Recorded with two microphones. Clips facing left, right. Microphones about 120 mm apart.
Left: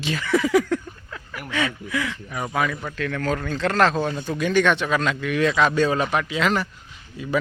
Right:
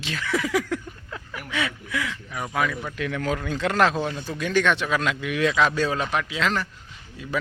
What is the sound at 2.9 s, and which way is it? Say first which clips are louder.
Speech: left 2 dB; 15° right (ahead or behind).